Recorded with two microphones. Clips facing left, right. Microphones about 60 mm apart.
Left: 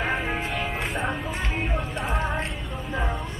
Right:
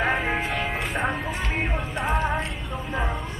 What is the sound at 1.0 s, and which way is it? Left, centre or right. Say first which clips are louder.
Music: right 2 dB; centre.